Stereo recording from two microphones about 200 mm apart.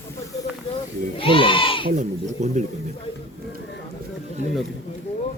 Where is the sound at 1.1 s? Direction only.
25° left (ahead or behind).